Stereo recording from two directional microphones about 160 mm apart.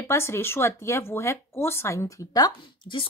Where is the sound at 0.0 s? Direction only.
15° left (ahead or behind).